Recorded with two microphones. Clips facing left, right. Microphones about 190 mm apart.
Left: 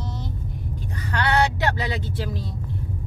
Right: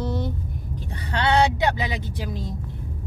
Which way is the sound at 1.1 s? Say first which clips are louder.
Right 2 dB; 20° right (ahead or behind).